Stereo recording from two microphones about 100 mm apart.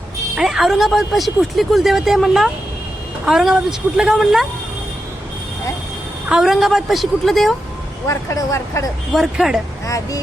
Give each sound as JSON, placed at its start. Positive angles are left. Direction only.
{"t": 0.3, "sound": "speech", "side_deg": -5}
{"t": 6.2, "sound": "speech", "side_deg": -5}
{"t": 8.0, "sound": "speech", "side_deg": 30}
{"t": 9.1, "sound": "speech", "side_deg": -5}
{"t": 9.8, "sound": "speech", "side_deg": 35}